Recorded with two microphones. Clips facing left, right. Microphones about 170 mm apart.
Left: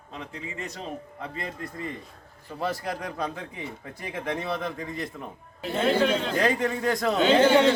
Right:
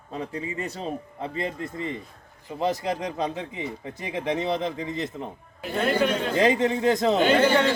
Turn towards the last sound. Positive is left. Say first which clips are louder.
# even
turn(degrees=0)  # may be behind; listen again after turning